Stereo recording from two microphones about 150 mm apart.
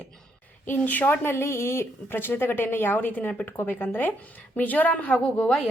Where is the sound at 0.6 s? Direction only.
10° left (ahead or behind).